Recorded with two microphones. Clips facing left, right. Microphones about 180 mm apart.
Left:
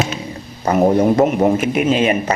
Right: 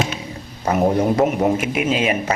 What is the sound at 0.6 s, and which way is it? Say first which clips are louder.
Speech: left 4 dB; centre (ahead or behind).